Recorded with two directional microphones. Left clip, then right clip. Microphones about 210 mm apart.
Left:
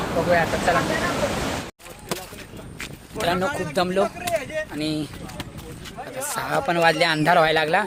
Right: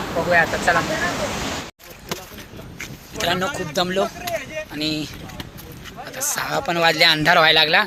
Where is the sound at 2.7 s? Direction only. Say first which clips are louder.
Right 1 dB; 45° left (ahead or behind).